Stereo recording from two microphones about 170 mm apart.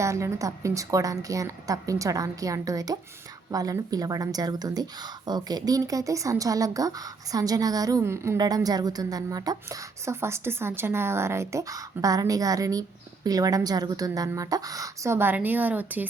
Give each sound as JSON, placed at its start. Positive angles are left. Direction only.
{"t": 0.0, "sound": "speech", "side_deg": -15}